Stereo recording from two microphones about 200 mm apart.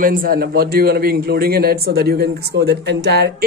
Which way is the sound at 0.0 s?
45° right (ahead or behind).